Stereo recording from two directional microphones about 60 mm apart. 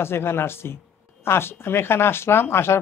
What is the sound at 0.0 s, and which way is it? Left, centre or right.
Speech, left.